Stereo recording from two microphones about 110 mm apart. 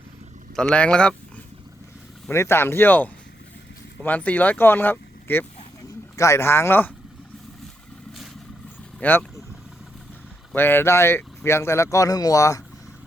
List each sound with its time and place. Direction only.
0.5 s speech: 10° left (ahead or behind)
2.3 s speech: 25° left (ahead or behind)
9.0 s vehicle: 20° left (ahead or behind)
10.5 s speech: 20° left (ahead or behind)